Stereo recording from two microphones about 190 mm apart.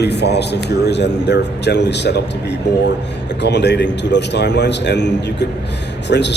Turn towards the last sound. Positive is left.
turn(degrees=60)  # may be behind; listen again after turning